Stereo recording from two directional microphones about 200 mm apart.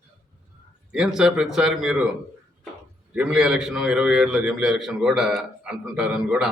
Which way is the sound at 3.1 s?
5° right (ahead or behind).